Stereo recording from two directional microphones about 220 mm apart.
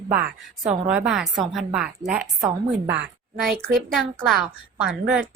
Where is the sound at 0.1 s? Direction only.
45° right (ahead or behind).